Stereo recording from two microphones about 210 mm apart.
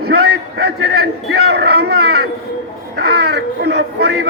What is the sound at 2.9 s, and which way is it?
A man's voice, 50° right (ahead or behind).